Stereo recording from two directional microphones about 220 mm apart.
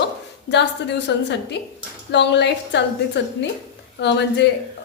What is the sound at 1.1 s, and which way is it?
A woman's voice, 50° left (ahead or behind).